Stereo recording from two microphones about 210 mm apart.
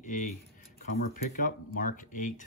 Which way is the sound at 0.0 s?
35° left (ahead or behind).